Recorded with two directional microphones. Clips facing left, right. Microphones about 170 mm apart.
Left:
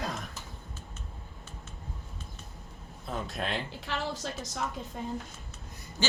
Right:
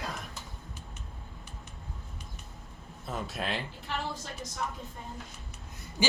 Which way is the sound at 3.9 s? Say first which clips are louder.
Left 1 dB; 90° left.